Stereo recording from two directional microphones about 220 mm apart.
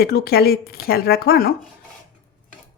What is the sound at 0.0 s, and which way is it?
Speech, 45° left (ahead or behind).